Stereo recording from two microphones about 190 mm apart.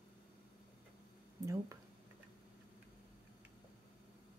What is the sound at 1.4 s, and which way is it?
Speech, 15° right (ahead or behind).